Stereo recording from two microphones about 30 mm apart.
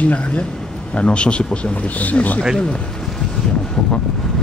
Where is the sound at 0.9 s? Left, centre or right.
Left.